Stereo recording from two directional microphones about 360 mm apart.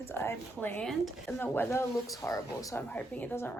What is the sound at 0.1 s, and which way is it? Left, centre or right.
A woman's voice, centre.